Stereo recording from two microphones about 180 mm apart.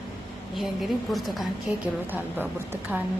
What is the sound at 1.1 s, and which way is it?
A woman's voice, centre (ahead or behind).